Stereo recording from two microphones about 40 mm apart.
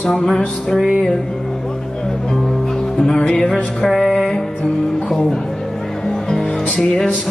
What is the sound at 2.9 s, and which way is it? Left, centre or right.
Music, centre.